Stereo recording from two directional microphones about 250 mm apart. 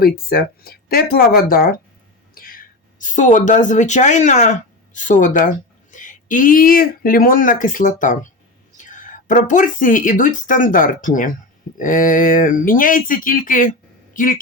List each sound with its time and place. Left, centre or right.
0.0 s speech: left